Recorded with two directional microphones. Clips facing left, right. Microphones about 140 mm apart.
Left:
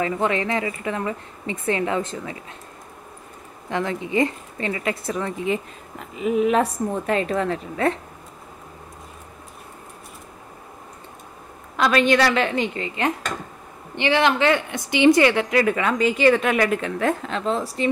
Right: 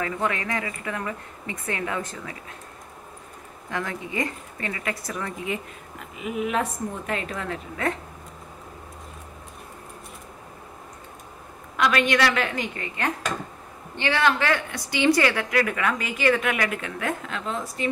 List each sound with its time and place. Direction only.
0.0 s a woman's voice: 25° left (ahead or behind)
3.7 s a woman's voice: 25° left (ahead or behind)
11.7 s a woman's voice: 30° left (ahead or behind)